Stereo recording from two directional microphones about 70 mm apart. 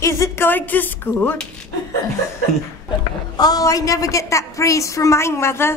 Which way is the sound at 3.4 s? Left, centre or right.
Left.